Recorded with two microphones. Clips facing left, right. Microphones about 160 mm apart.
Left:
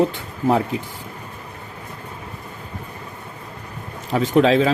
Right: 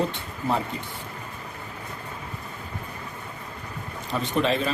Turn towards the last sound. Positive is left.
turn(degrees=90)